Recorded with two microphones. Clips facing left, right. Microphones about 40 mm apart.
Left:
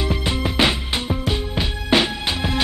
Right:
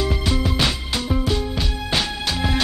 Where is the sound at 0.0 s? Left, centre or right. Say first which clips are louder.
Even; left.